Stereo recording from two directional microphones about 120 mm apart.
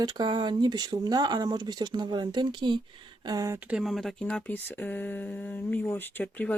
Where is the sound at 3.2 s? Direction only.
30° right (ahead or behind).